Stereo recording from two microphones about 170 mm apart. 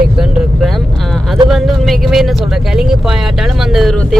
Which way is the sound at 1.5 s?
Centre (ahead or behind).